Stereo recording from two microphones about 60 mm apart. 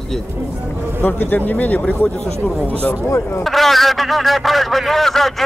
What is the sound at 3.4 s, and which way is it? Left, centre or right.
A man's voice, centre.